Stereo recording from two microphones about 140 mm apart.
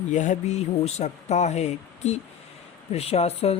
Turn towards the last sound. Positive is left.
turn(degrees=45)  # may be behind; listen again after turning